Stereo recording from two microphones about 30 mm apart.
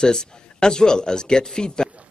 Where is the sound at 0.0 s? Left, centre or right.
Left.